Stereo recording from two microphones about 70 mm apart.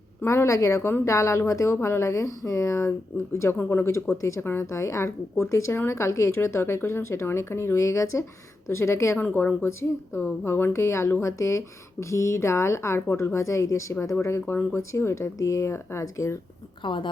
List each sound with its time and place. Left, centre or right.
0.3 s speech: left
1.0 s speech: left
4.8 s speech: left
9.1 s speech: left
16.8 s a woman's voice: left